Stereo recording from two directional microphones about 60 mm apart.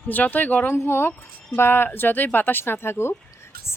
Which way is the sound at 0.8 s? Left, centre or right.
Left.